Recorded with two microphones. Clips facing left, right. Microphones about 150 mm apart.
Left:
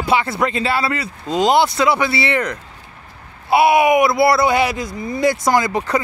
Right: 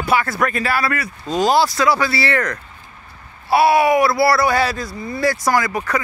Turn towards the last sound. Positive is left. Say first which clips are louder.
# left 2 dB
turn(degrees=25)  # may be behind; listen again after turning